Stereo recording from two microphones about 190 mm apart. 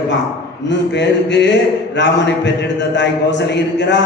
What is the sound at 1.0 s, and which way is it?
A man's voice, 65° left (ahead or behind).